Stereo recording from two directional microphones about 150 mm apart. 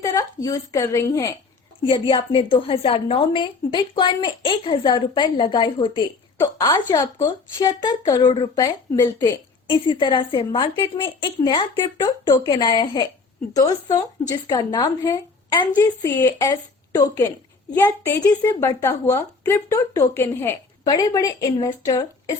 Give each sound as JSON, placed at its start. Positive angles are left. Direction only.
{"t": 0.0, "sound": "a woman's voice", "side_deg": 20}
{"t": 1.8, "sound": "a woman's voice", "side_deg": 35}
{"t": 6.4, "sound": "a woman's voice", "side_deg": 20}
{"t": 9.6, "sound": "a woman's voice", "side_deg": 30}